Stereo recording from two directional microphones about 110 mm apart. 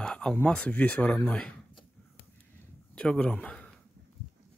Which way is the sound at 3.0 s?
10° left (ahead or behind).